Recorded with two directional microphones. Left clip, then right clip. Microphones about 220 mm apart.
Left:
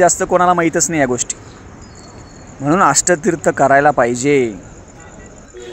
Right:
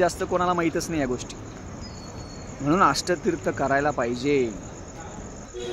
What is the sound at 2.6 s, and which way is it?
Speech, 35° left (ahead or behind).